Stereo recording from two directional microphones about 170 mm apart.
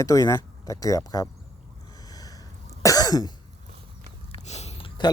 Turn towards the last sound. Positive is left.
turn(degrees=30)  # may be behind; listen again after turning